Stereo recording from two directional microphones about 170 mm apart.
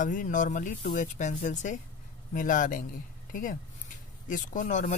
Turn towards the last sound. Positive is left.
turn(degrees=50)  # may be behind; listen again after turning